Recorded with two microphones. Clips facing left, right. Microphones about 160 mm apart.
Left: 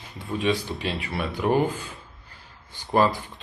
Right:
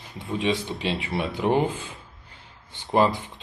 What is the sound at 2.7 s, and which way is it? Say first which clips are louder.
Speech: even; 25° right (ahead or behind).